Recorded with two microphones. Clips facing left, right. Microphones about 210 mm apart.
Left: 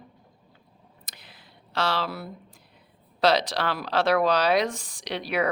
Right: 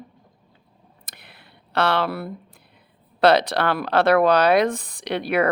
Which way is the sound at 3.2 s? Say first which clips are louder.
Right 5 dB; 60° right (ahead or behind).